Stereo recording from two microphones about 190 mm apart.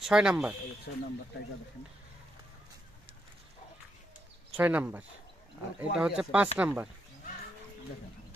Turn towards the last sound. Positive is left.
turn(degrees=-5)  # may be behind; listen again after turning